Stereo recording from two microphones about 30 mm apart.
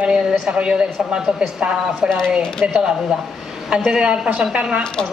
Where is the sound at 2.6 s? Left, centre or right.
Right.